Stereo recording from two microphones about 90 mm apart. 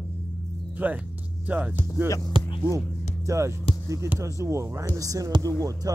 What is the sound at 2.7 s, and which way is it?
Speech, 35° right (ahead or behind).